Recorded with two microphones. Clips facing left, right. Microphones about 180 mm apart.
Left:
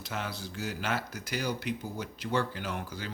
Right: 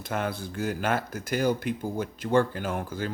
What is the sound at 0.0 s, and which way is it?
Speech, 55° right (ahead or behind).